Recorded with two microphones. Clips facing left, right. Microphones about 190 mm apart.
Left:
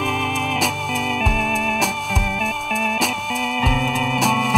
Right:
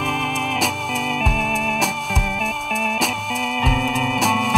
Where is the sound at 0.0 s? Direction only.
Centre (ahead or behind).